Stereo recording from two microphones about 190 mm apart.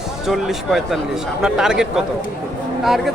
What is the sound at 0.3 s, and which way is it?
Speech, centre (ahead or behind).